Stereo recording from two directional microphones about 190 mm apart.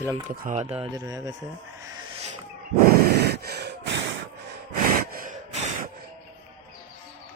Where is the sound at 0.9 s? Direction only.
20° right (ahead or behind).